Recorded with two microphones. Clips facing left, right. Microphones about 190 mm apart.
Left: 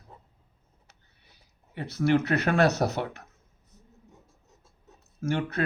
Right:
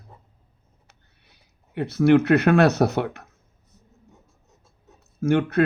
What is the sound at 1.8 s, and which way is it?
Speech, 60° right (ahead or behind).